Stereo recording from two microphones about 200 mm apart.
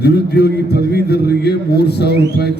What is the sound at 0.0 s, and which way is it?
A man's voice, 55° left (ahead or behind).